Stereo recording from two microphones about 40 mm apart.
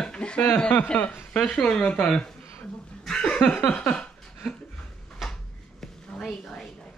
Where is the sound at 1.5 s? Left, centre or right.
Centre.